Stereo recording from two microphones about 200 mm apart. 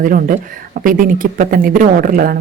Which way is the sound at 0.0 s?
45° right (ahead or behind).